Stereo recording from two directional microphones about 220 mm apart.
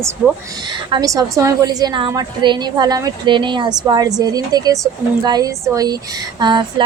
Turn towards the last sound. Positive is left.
turn(degrees=-20)  # may be behind; listen again after turning